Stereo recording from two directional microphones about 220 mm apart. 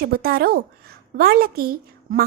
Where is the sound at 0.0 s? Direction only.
45° right (ahead or behind).